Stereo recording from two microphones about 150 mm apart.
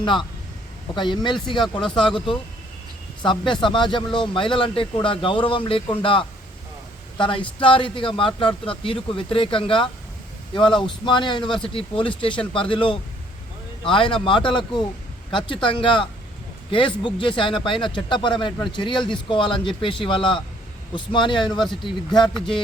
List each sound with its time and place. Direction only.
0.0 s a man's voice: 30° left (ahead or behind)